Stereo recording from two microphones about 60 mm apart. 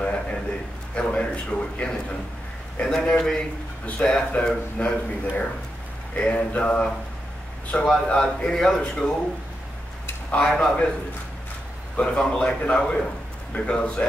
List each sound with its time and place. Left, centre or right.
0.0 s a sound: centre
0.9 s a man's voice: left
4.0 s a man's voice: left; by 9.1 s centre
10.3 s speech: centre
12.0 s speech: centre